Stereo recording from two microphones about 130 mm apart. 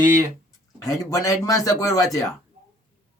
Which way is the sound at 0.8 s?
25° left (ahead or behind).